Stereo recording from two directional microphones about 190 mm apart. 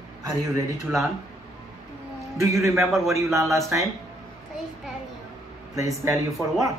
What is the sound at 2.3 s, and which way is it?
Speech, 15° right (ahead or behind).